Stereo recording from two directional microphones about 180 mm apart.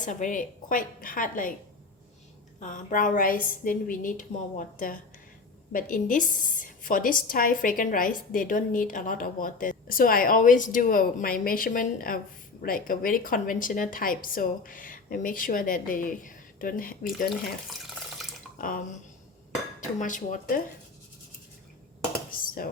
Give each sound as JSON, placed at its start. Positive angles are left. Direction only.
{"t": 0.0, "sound": "a woman's voice", "side_deg": 45}
{"t": 2.6, "sound": "a woman's voice", "side_deg": 45}
{"t": 18.5, "sound": "drip", "side_deg": 50}
{"t": 20.0, "sound": "a woman's voice", "side_deg": 45}
{"t": 22.4, "sound": "cutlery", "side_deg": 50}